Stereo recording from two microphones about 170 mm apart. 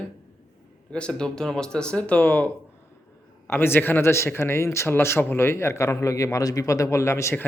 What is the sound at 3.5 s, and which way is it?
Speech, 10° left (ahead or behind).